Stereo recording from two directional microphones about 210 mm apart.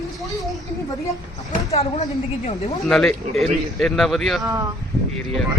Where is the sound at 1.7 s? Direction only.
30° left (ahead or behind).